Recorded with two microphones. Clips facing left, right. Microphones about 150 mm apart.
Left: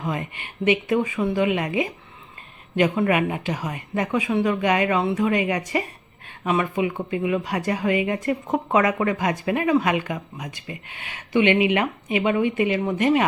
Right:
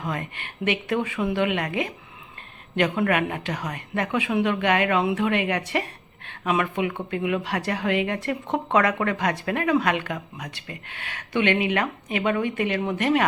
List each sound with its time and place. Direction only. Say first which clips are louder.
0.7 s speech: left 4 dB; 5° left (ahead or behind)
2.7 s speech: left 2 dB; 5° left (ahead or behind)
10.8 s speech: right 1 dB; 55° right (ahead or behind)
11.6 s speech: left 3 dB; 10° left (ahead or behind)